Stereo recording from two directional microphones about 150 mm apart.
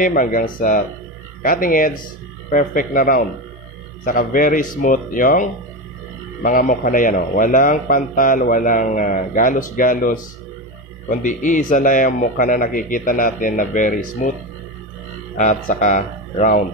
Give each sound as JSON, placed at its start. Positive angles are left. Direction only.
{"t": 0.0, "sound": "a man's voice", "side_deg": 65}
{"t": 15.3, "sound": "a man's voice", "side_deg": 55}